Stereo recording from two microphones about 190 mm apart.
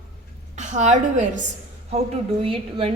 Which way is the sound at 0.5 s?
40° right (ahead or behind).